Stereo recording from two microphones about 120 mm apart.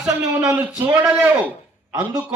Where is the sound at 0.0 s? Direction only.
5° right (ahead or behind).